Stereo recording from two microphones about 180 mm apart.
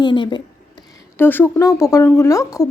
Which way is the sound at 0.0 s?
25° left (ahead or behind).